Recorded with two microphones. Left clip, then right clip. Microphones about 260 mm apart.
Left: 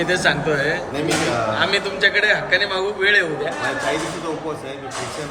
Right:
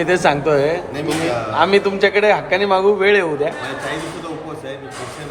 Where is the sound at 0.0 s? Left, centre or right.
Right.